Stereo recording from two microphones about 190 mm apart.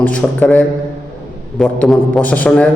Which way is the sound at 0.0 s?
5° left (ahead or behind).